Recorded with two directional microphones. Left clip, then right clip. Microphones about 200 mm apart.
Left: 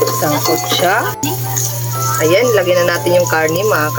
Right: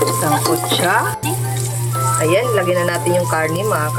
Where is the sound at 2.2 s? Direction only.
20° left (ahead or behind).